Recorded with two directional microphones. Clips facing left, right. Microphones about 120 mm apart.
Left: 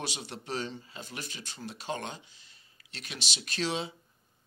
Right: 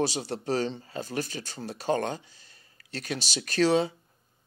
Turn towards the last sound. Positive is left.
turn(degrees=-45)  # may be behind; listen again after turning